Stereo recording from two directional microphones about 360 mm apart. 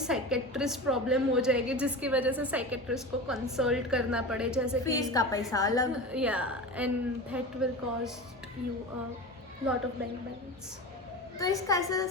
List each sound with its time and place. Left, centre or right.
0.0 s a woman's voice: centre
4.9 s a woman's voice: centre
6.1 s a woman's voice: centre
11.3 s a woman's voice: centre